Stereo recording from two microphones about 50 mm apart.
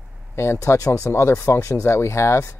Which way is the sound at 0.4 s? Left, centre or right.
Left.